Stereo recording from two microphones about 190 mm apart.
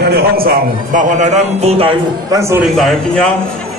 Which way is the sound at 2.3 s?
15° right (ahead or behind).